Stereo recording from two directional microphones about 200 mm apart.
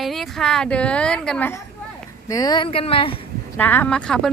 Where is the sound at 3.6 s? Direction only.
10° left (ahead or behind).